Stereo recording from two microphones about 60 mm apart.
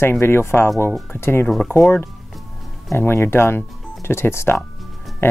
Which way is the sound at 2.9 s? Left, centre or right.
Left.